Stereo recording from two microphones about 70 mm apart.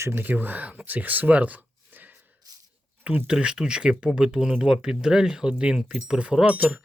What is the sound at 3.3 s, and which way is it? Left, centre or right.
Speech, centre.